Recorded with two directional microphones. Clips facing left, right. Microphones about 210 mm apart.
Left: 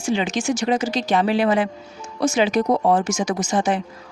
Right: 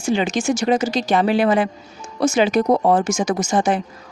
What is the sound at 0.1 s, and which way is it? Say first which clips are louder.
Speech: right 2 dB; 45° right (ahead or behind).